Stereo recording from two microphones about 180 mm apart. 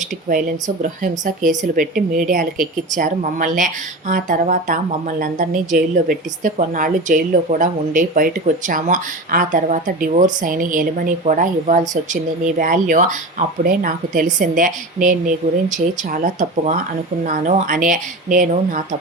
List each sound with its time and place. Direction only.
0.3 s a woman's voice: 50° right (ahead or behind)